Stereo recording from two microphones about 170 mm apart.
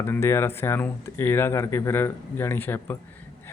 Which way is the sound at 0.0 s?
15° left (ahead or behind).